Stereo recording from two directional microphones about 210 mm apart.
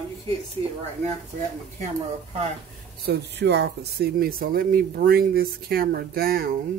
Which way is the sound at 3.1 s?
55° right (ahead or behind).